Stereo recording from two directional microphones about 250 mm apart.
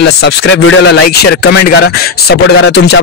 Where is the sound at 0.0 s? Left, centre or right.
Left.